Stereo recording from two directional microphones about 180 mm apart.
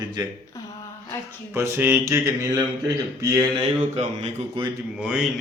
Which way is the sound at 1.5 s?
15° right (ahead or behind).